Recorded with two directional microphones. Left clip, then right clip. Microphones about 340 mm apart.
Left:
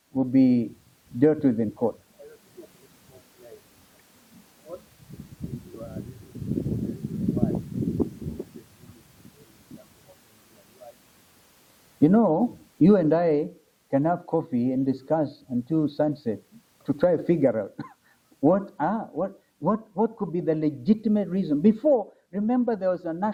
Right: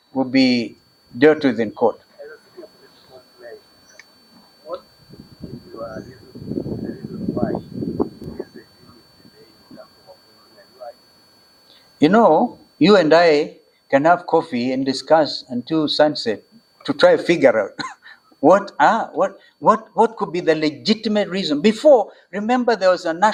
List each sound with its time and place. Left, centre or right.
0.1 s speech: centre
1.7 s speech: centre
7.3 s a sound: centre
11.9 s speech: centre
12.2 s speech: centre
12.8 s a man's voice: centre
20.3 s a man's voice: centre